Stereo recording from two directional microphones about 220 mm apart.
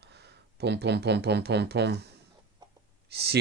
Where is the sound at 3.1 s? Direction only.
50° right (ahead or behind).